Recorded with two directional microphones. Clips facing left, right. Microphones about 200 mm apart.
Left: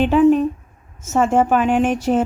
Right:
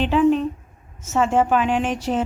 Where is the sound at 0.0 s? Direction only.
50° left (ahead or behind).